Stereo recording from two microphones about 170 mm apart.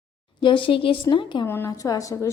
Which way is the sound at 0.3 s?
30° left (ahead or behind).